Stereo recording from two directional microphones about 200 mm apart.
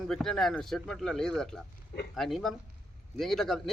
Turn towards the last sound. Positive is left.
turn(degrees=0)  # may be behind; listen again after turning